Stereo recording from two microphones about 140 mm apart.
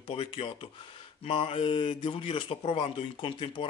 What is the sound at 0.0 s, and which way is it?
Speech, 45° left (ahead or behind).